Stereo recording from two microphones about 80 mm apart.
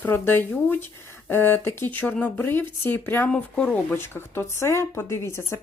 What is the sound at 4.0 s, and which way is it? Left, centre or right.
Speech, left.